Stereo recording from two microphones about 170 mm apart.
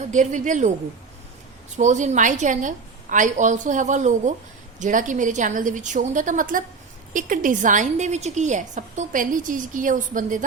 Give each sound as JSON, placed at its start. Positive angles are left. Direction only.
{"t": 0.1, "sound": "a woman's voice", "side_deg": -45}
{"t": 1.7, "sound": "a woman's voice", "side_deg": -45}